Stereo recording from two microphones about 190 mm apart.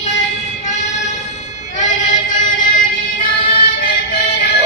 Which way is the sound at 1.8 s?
40° left (ahead or behind).